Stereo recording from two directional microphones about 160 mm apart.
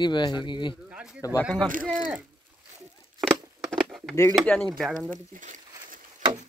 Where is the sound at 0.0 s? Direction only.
25° left (ahead or behind).